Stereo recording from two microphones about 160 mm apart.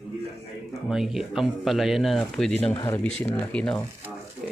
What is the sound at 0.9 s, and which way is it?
Speech, centre (ahead or behind).